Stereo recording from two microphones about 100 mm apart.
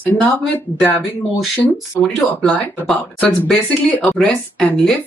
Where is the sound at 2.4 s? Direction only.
10° left (ahead or behind).